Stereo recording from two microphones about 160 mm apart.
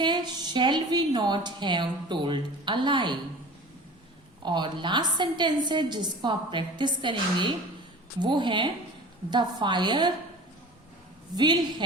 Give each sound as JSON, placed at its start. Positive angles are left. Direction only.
{"t": 0.0, "sound": "a woman's voice", "side_deg": -25}
{"t": 4.4, "sound": "a woman's voice", "side_deg": -30}
{"t": 11.3, "sound": "a woman's voice", "side_deg": -25}